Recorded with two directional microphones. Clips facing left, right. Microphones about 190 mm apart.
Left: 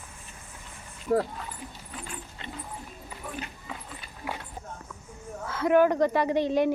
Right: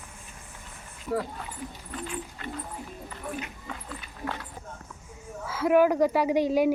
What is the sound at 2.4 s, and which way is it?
Music, 20° left (ahead or behind).